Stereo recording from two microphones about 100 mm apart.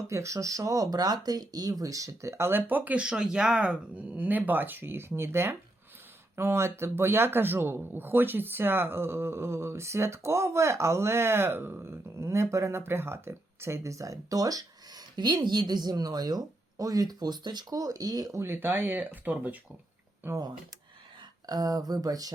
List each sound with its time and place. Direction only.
0.1 s a man's voice: 30° right (ahead or behind)
21.4 s speech: 40° right (ahead or behind)